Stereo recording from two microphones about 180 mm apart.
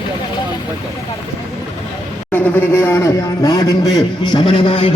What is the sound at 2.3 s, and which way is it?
A man's voice, 10° left (ahead or behind).